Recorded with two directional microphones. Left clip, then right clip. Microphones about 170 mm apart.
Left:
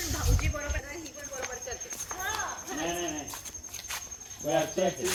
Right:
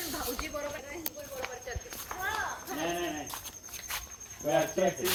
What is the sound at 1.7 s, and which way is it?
Cricket, 60° left (ahead or behind).